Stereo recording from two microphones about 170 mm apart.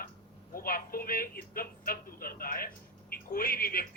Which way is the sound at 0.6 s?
60° left (ahead or behind).